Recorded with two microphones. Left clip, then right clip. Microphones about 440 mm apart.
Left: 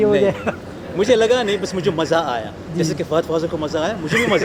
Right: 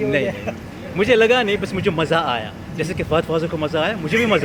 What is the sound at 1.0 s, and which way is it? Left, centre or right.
A man's voice, right.